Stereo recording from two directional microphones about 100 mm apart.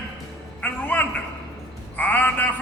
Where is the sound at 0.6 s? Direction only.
15° left (ahead or behind).